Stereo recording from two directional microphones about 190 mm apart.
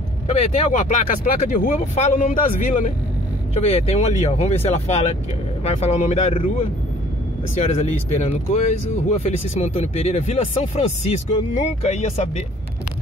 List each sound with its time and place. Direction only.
0.3 s speech: 35° left (ahead or behind)
7.6 s speech: 40° left (ahead or behind)